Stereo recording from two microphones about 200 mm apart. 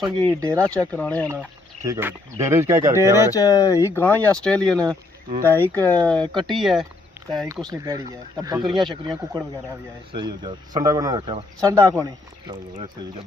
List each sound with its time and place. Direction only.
0.3 s speech: 15° right (ahead or behind)
0.6 s speech: 5° left (ahead or behind)
1.3 s speech: 15° right (ahead or behind)
3.2 s speech: 15° left (ahead or behind)
6.1 s speech: 25° right (ahead or behind)
6.5 s speech: centre (ahead or behind)
7.3 s speech: 15° right (ahead or behind)
8.8 s speech: centre (ahead or behind)
9.3 s speech: 20° right (ahead or behind)